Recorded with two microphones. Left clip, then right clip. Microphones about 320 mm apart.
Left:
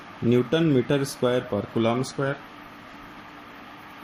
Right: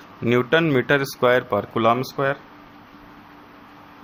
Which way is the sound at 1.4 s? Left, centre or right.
Right.